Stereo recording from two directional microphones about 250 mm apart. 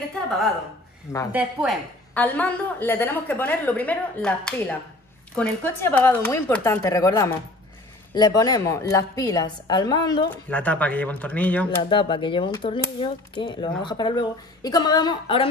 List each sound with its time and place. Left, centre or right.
1.3 s a woman's voice: centre
10.5 s speech: centre
11.8 s speech: centre